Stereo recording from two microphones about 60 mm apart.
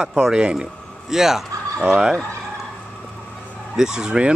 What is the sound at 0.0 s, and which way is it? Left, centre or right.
Speech, centre.